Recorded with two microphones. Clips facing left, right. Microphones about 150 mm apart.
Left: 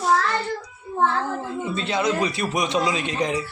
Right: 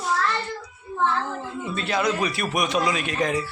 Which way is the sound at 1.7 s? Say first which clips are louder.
Even; 20° left (ahead or behind).